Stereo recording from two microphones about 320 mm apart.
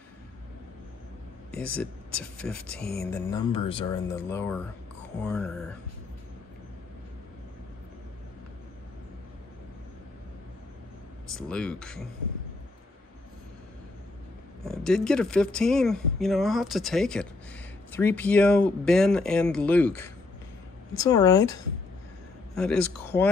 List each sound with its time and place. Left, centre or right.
1.5 s speech: centre
11.3 s speech: centre
14.6 s speech: centre
22.6 s speech: centre